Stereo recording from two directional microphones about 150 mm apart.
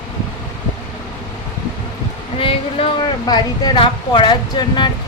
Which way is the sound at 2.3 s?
40° left (ahead or behind).